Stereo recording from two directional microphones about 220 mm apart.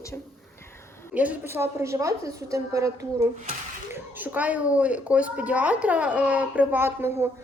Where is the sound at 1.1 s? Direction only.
5° right (ahead or behind).